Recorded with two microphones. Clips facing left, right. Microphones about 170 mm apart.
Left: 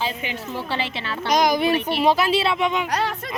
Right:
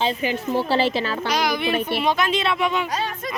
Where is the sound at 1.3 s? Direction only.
45° left (ahead or behind); by 2.9 s 20° left (ahead or behind).